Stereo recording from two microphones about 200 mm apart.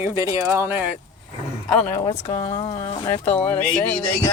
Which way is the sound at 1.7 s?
10° left (ahead or behind).